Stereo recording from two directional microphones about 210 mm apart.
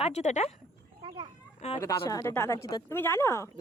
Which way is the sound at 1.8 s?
15° left (ahead or behind).